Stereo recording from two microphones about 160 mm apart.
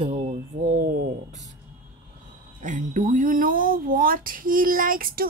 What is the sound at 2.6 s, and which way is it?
Speech, 55° right (ahead or behind).